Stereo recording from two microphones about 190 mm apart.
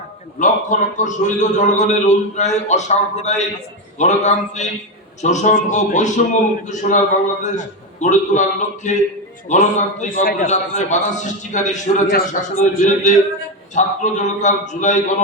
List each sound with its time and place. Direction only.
0.3 s a man's voice: 40° left (ahead or behind)